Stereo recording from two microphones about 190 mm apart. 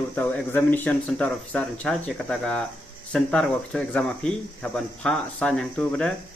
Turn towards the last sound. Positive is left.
turn(degrees=5)  # may be behind; listen again after turning